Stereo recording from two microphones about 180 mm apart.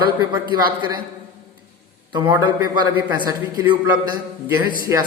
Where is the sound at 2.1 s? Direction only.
25° right (ahead or behind).